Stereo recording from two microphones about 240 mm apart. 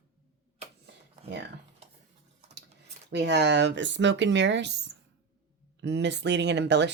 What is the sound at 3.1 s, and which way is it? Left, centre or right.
Speech, right.